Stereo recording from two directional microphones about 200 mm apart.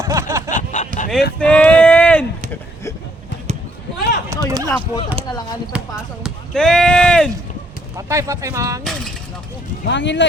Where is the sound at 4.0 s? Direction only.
55° left (ahead or behind).